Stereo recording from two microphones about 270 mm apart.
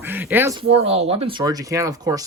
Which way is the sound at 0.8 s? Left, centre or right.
Right.